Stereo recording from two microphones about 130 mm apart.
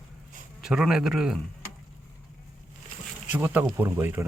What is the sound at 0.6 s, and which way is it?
Speech, 5° right (ahead or behind).